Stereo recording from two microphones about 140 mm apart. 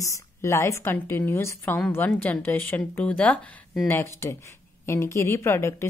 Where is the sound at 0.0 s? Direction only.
20° left (ahead or behind).